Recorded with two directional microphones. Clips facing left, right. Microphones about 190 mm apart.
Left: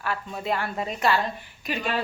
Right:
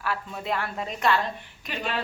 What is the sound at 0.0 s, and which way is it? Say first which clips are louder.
A woman's voice: left 1 dB; centre (ahead or behind).